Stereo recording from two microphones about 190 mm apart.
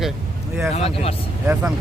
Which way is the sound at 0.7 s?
30° left (ahead or behind).